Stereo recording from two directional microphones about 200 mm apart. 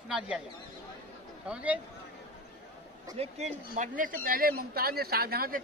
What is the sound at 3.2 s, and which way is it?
Speech, 35° right (ahead or behind).